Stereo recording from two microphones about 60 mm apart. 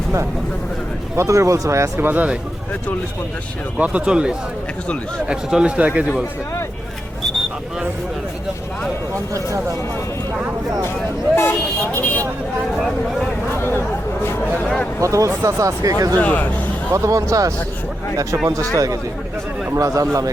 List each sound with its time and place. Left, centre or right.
1.1 s speech: right
2.0 s speech: right
3.8 s speech: right
9.1 s speech: right
11.9 s speech: left
13.5 s a sound: left
15.0 s speech: right
16.2 s speech: left
16.9 s speech: right
18.4 s speech: right